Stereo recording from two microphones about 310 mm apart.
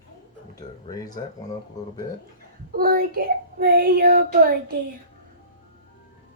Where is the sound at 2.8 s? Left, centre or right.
Right.